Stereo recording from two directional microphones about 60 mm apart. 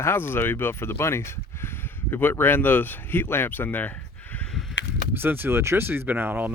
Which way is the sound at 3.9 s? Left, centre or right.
Left.